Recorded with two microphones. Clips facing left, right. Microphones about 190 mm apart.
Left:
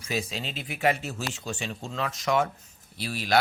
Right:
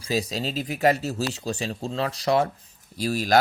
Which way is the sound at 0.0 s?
35° right (ahead or behind).